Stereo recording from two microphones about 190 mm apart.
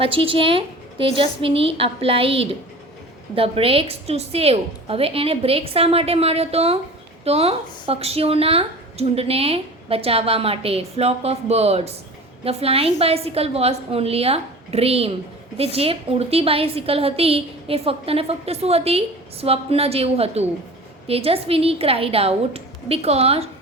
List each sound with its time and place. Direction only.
0.0 s a woman's voice: 30° right (ahead or behind)